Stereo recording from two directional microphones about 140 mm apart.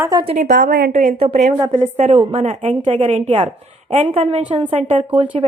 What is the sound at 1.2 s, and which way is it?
A woman's voice, 45° right (ahead or behind).